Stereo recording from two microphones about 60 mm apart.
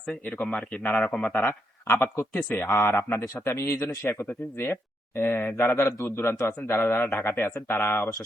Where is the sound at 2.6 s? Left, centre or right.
Left.